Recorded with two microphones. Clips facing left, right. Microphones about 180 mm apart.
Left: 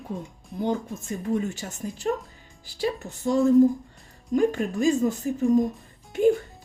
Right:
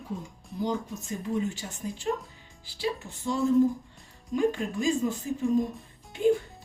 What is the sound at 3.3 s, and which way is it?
Speech, 45° left (ahead or behind).